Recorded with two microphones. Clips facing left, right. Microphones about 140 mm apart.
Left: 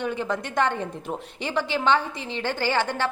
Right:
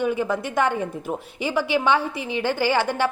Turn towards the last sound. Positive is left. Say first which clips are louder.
# right 3 dB
turn(degrees=-10)  # may be behind; listen again after turning